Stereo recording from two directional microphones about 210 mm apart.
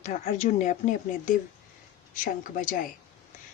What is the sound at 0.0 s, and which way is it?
A woman's voice, 35° left (ahead or behind).